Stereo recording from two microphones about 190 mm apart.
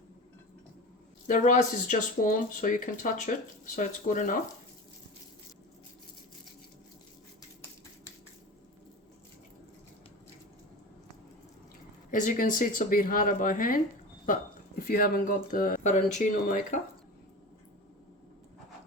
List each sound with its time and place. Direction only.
1.3 s speech: 40° left (ahead or behind)
12.1 s speech: 45° left (ahead or behind)